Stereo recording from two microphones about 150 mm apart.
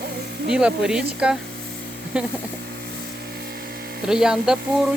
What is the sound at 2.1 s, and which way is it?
Speech, 5° right (ahead or behind).